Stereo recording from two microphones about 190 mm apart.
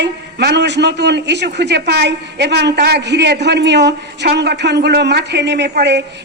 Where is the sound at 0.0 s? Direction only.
60° right (ahead or behind).